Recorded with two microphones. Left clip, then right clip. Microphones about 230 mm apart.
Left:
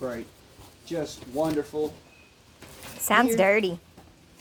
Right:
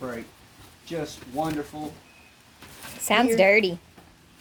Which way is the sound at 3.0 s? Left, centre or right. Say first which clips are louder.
Right 2 dB; centre.